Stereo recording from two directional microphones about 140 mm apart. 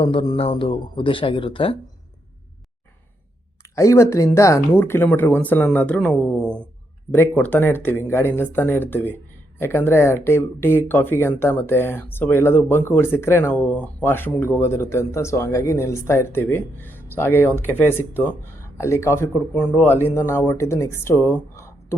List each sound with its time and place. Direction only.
0.0 s a man's voice: 35° left (ahead or behind)
3.8 s speech: 20° left (ahead or behind)
21.5 s a sound: 20° left (ahead or behind)